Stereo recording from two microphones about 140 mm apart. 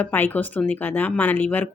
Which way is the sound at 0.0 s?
15° left (ahead or behind).